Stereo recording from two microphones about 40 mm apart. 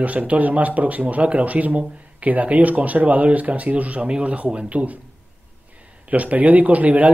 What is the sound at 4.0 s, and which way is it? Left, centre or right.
Speech, right.